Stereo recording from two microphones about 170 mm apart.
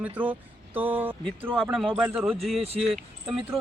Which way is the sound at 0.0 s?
10° right (ahead or behind).